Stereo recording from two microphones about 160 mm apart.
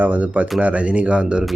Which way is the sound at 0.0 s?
10° right (ahead or behind).